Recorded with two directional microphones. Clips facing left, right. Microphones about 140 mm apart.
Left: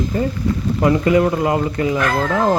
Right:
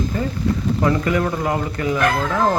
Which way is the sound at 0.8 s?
20° left (ahead or behind).